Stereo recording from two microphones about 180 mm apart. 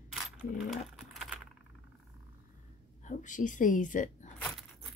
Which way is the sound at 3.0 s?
45° left (ahead or behind).